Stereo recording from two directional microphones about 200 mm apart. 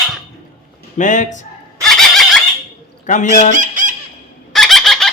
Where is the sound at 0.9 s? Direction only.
40° left (ahead or behind).